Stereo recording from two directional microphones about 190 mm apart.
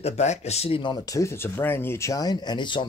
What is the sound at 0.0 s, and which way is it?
Speech, 35° left (ahead or behind).